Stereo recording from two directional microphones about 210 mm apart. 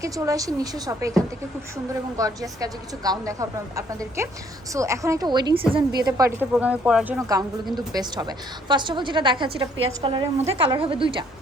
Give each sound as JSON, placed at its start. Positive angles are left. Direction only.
{"t": 0.0, "sound": "a woman's voice", "side_deg": -15}